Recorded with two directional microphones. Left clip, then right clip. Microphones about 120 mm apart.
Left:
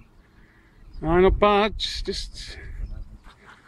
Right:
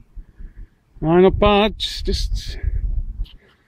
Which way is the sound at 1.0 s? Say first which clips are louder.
Right 4 dB; 25° right (ahead or behind).